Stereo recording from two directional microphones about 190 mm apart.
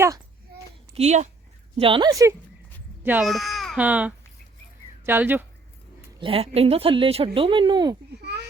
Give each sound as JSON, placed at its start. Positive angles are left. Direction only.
{"t": 0.9, "sound": "a woman's voice", "side_deg": -35}
{"t": 1.8, "sound": "a child's voice", "side_deg": -25}
{"t": 6.1, "sound": "a woman's voice", "side_deg": -30}
{"t": 8.2, "sound": "a sound", "side_deg": -60}